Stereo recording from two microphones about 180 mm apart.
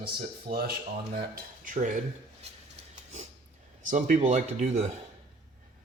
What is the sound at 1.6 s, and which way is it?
Cutlery, 45° right (ahead or behind).